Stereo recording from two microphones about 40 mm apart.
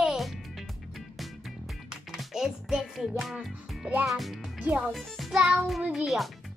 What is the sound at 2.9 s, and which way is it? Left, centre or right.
Speech, centre.